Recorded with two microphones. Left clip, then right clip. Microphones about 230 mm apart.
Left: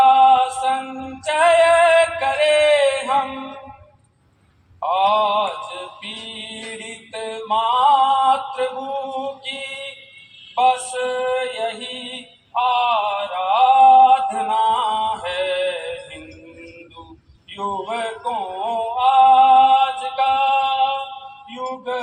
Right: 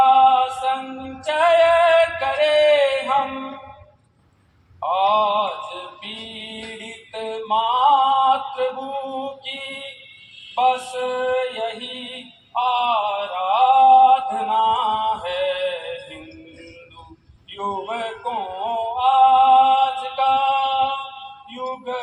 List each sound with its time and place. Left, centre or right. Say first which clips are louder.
0.0 s a sound: left 1 dB; left
1.2 s music: left 1 dB; left
4.8 s mantra: left 1 dB; left
7.1 s music: even; left
10.5 s mantra: left 2 dB; left
17.5 s music: left 1 dB; left